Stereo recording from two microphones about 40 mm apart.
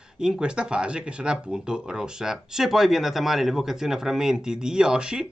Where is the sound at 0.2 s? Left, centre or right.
Right.